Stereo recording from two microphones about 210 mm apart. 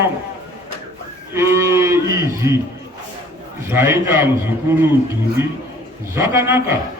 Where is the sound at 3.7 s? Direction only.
10° right (ahead or behind).